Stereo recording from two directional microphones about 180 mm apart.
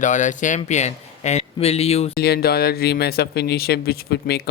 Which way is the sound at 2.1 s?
60° left (ahead or behind).